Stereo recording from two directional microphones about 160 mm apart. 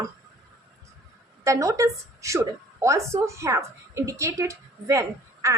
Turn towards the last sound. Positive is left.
turn(degrees=-20)  # may be behind; listen again after turning